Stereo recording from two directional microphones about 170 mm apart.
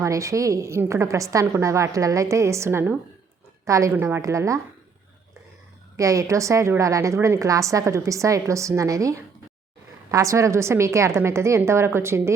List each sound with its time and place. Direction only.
0.0 s a woman's voice: 20° right (ahead or behind)
6.0 s a woman's voice: 20° right (ahead or behind)